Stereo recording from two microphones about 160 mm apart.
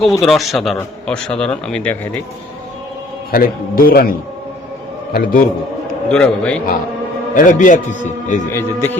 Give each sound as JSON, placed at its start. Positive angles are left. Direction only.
{"t": 0.0, "sound": "speech", "side_deg": 0}
{"t": 3.3, "sound": "a man's voice", "side_deg": 65}
{"t": 6.1, "sound": "speech", "side_deg": 5}
{"t": 7.3, "sound": "a man's voice", "side_deg": 55}
{"t": 8.5, "sound": "speech", "side_deg": 15}